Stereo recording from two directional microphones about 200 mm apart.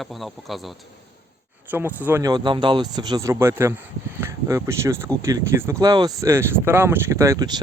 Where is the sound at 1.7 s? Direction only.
10° right (ahead or behind).